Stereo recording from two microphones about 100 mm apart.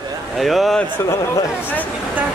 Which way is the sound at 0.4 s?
Centre (ahead or behind).